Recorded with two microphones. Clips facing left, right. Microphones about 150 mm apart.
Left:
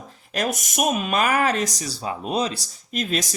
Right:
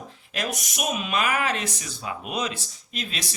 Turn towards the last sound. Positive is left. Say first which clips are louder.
# left 9 dB
turn(degrees=45)  # may be behind; listen again after turning